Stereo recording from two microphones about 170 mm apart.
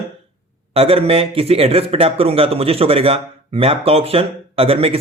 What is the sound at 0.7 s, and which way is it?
Speech, 35° right (ahead or behind).